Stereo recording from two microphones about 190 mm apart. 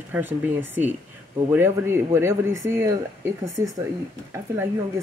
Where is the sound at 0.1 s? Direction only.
5° right (ahead or behind).